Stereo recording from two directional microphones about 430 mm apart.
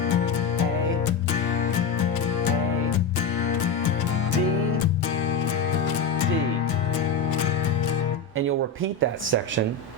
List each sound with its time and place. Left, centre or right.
8.4 s speech: right